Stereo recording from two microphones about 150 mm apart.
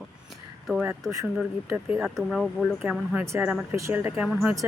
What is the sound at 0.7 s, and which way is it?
Speech, 10° right (ahead or behind).